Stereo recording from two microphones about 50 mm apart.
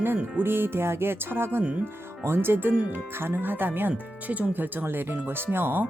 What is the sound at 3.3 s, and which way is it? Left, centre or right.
Speech, right.